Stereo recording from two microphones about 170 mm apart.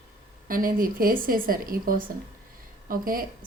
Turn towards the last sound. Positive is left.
turn(degrees=-55)  # may be behind; listen again after turning